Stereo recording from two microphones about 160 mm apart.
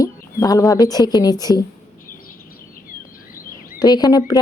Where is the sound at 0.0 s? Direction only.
20° left (ahead or behind).